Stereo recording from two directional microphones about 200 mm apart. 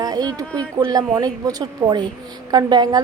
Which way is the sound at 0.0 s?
20° right (ahead or behind).